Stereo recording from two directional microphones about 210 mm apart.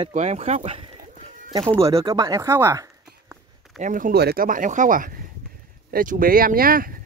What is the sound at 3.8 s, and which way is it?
Speech, 40° right (ahead or behind).